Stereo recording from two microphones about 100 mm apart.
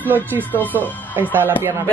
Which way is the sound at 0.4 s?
15° left (ahead or behind).